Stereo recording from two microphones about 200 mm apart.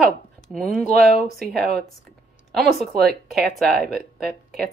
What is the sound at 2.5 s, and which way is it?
Speech, centre (ahead or behind).